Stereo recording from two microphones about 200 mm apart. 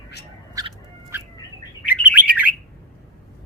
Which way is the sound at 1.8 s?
5° right (ahead or behind).